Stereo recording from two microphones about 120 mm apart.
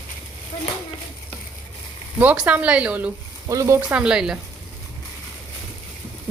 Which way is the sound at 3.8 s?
10° right (ahead or behind).